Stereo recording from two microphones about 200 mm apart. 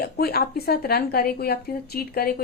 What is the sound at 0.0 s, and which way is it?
Speech, 50° left (ahead or behind).